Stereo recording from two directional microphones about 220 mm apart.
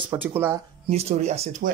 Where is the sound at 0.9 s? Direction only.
30° right (ahead or behind).